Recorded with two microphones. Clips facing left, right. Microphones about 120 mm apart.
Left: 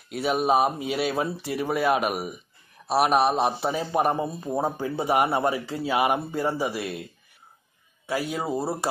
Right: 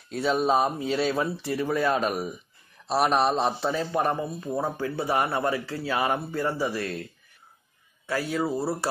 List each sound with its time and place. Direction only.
0.1 s a man's voice: 15° left (ahead or behind)
8.1 s speech: 15° left (ahead or behind)